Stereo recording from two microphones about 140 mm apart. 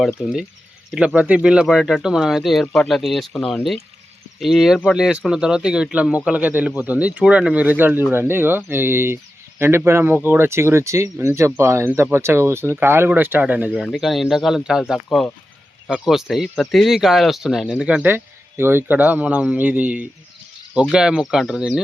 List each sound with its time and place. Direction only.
0.2 s speech: 5° right (ahead or behind)
13.8 s speech: centre (ahead or behind)